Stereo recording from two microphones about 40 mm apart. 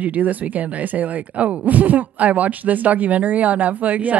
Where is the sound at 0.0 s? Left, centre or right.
Right.